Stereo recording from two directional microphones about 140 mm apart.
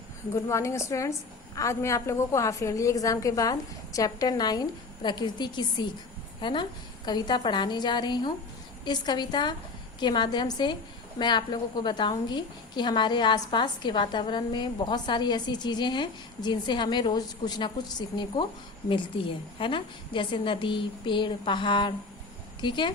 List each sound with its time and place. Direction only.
0.3 s a woman's voice: 20° left (ahead or behind)